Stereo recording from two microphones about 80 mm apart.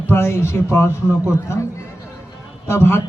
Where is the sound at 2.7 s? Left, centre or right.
Left.